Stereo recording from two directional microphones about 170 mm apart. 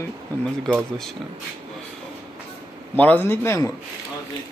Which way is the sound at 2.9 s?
10° left (ahead or behind).